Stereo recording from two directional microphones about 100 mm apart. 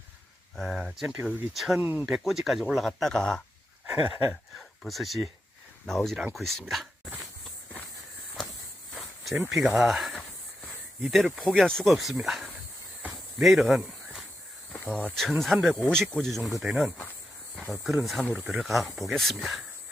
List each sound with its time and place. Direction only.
0.5 s speech: centre (ahead or behind)
1.1 s speech: 15° right (ahead or behind)
1.5 s speech: centre (ahead or behind)
1.8 s speech: 15° right (ahead or behind)
2.0 s speech: 5° right (ahead or behind)
9.0 s a sound: centre (ahead or behind)
9.5 s speech: centre (ahead or behind)